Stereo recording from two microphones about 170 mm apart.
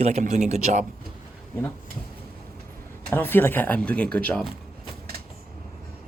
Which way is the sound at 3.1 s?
10° left (ahead or behind).